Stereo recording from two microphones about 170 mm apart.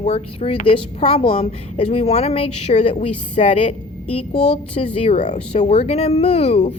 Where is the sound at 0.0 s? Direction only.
35° left (ahead or behind).